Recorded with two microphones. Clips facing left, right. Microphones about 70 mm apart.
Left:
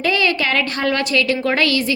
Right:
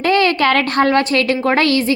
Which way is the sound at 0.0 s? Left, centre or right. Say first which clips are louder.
Right 5 dB; right.